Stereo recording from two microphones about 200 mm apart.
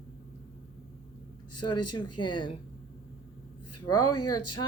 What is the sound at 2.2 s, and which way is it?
Speech, 25° left (ahead or behind).